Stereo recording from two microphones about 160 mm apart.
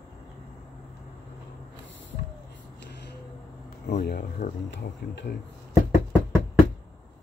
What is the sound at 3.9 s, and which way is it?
Speech, 75° left (ahead or behind).